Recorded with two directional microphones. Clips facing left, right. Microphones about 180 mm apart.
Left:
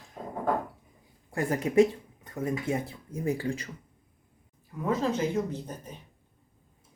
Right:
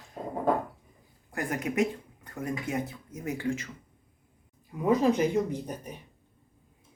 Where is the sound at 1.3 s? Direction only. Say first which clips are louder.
Left 6 dB; 30° left (ahead or behind).